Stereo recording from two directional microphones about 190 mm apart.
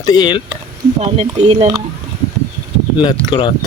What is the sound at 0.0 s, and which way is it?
Speech, 20° left (ahead or behind).